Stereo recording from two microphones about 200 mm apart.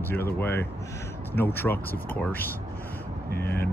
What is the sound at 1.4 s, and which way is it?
Speech, 10° left (ahead or behind).